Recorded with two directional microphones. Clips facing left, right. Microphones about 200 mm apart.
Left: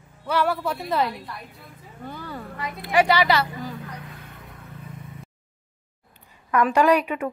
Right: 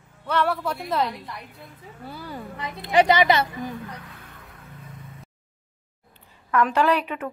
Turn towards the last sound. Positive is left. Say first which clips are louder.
# left 3 dB
turn(degrees=10)  # may be behind; listen again after turning